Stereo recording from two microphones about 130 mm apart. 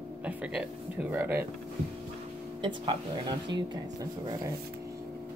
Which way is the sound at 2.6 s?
40° right (ahead or behind).